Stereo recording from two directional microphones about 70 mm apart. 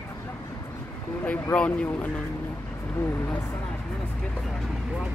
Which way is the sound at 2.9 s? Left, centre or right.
Left.